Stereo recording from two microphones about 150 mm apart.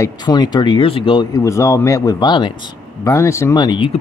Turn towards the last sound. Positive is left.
turn(degrees=30)  # may be behind; listen again after turning